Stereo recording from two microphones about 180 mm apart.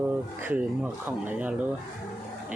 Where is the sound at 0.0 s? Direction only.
10° right (ahead or behind).